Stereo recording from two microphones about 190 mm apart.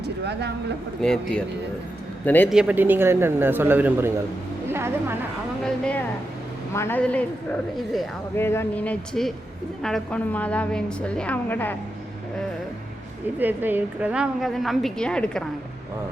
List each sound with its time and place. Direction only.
0.0 s speech: 60° right (ahead or behind)
1.0 s a woman's voice: 5° left (ahead or behind)
2.5 s speech: 5° right (ahead or behind)
4.7 s music: 10° right (ahead or behind)
5.6 s a woman's voice: 5° left (ahead or behind)
8.4 s a woman's voice: 10° left (ahead or behind)
13.4 s a woman's voice: 10° right (ahead or behind)